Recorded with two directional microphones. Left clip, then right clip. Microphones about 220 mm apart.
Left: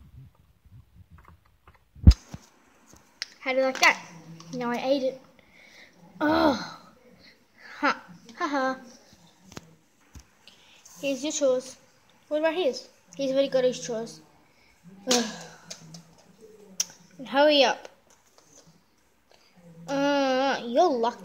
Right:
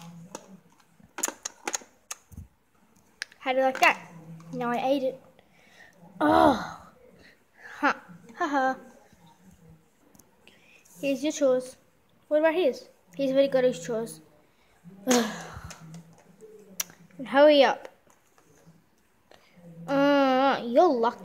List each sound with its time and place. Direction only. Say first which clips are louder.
3.2 s a sound: even; 10° right (ahead or behind)
4.6 s a child's voice: even; 5° right (ahead or behind)
6.1 s a woman's voice: right 3 dB; 10° right (ahead or behind)
7.2 s a sound: right 1 dB; 5° right (ahead or behind)
10.8 s a woman's voice: right 1 dB; 20° right (ahead or behind)
15.1 s speech: right 1 dB; 25° right (ahead or behind)
16.7 s computer keyboard: left 4 dB; 15° right (ahead or behind)
19.9 s a child's voice: right 2 dB; 15° right (ahead or behind)